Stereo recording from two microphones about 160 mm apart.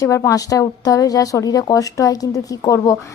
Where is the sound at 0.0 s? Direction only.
20° left (ahead or behind).